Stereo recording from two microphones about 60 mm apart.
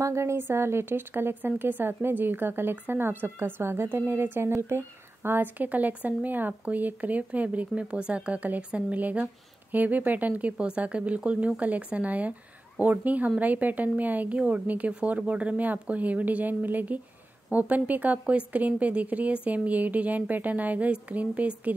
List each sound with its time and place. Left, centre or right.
0.0 s a woman's voice: right
0.4 s a woman's voice: right